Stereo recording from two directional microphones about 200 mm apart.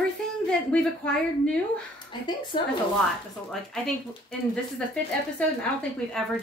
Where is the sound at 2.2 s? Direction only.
25° left (ahead or behind).